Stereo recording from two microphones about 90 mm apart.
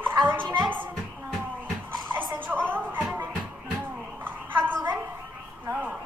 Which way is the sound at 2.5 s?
20° right (ahead or behind).